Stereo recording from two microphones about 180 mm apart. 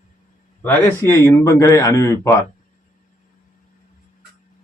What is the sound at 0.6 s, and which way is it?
A man's voice, 10° left (ahead or behind).